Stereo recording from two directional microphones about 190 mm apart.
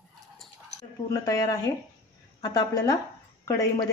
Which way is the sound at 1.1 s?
15° left (ahead or behind).